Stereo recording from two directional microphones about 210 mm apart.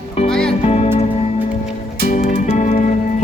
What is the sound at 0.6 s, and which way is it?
Music, 30° left (ahead or behind).